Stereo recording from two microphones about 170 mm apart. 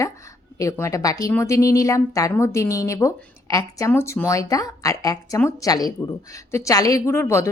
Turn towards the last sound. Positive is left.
turn(degrees=15)  # may be behind; listen again after turning